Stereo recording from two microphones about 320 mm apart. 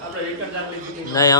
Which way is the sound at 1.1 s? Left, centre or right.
Centre.